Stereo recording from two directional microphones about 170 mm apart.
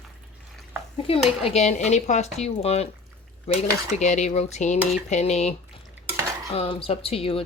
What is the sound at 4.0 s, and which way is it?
Speech, 45° left (ahead or behind).